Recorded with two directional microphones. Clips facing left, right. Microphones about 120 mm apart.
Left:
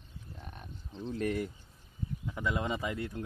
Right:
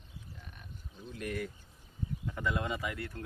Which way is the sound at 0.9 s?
30° left (ahead or behind).